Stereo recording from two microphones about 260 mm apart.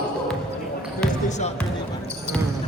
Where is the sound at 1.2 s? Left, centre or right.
Left.